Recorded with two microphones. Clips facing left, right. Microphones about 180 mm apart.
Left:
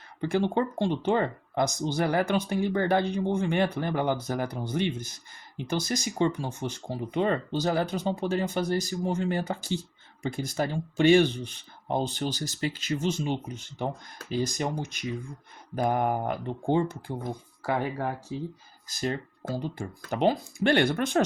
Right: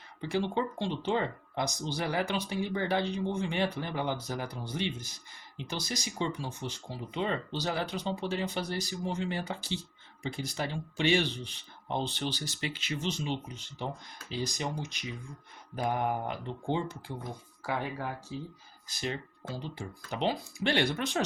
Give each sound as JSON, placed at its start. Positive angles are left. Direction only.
{"t": 0.2, "sound": "speech", "side_deg": 50}